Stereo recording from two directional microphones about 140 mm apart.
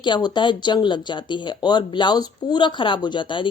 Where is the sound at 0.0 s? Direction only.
35° left (ahead or behind).